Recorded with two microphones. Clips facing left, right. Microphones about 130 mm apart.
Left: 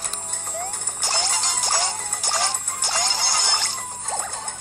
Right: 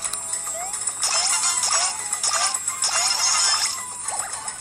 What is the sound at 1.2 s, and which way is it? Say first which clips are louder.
Music: left 1 dB; centre (ahead or behind).